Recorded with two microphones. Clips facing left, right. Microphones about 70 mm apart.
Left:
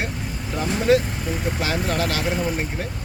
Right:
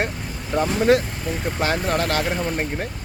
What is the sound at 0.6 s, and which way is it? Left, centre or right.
Speech, right.